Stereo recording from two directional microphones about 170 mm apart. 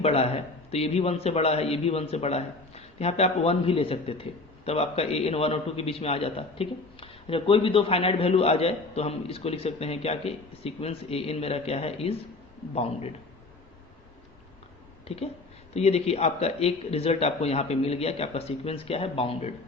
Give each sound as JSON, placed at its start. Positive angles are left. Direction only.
{"t": 0.0, "sound": "speech", "side_deg": 35}
{"t": 15.0, "sound": "a woman's voice", "side_deg": 35}